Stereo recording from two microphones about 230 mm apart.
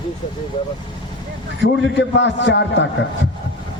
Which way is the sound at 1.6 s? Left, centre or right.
Left.